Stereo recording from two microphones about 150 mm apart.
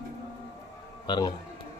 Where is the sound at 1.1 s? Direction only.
25° left (ahead or behind).